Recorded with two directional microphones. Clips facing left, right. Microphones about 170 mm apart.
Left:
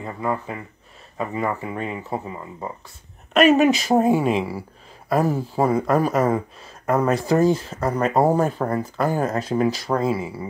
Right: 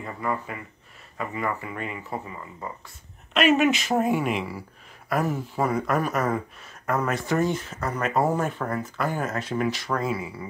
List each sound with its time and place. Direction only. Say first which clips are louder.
0.0 s speech: left 4 dB; 25° left (ahead or behind)